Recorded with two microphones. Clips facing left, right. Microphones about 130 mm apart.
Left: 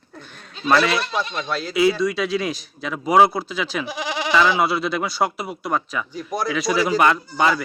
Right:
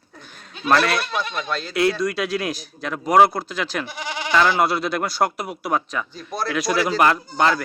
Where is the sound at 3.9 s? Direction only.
90° left.